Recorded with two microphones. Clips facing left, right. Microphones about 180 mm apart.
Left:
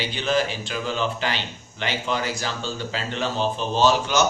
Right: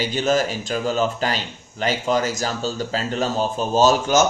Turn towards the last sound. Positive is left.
turn(degrees=-45)  # may be behind; listen again after turning